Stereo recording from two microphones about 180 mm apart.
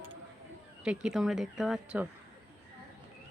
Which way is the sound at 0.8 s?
5° right (ahead or behind).